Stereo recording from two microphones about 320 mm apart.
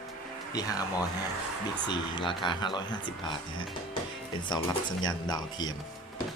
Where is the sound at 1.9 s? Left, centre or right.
Centre.